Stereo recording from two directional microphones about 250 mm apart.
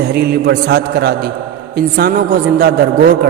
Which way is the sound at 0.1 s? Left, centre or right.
Right.